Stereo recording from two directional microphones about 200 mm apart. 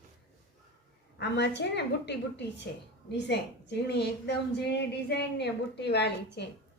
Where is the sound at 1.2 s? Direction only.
60° left (ahead or behind).